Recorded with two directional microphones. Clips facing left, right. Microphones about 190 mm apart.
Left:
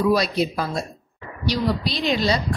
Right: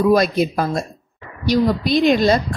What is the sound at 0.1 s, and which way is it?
A woman's voice, 50° right (ahead or behind).